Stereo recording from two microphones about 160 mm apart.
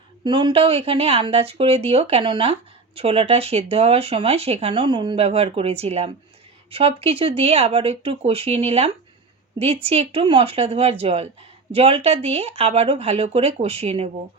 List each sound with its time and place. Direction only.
0.3 s speech: 30° right (ahead or behind)